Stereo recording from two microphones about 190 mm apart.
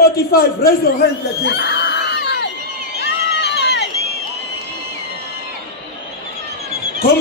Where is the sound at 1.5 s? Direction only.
65° left (ahead or behind).